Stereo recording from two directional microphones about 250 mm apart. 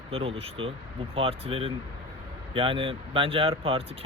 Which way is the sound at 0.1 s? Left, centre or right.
Right.